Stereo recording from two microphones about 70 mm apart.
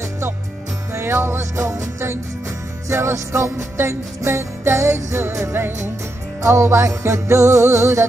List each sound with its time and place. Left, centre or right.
0.9 s music: right